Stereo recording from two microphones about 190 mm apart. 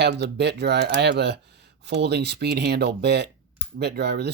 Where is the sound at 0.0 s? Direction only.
60° right (ahead or behind).